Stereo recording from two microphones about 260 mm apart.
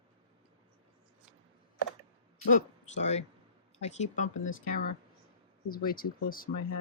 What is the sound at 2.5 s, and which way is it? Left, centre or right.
Speech, left.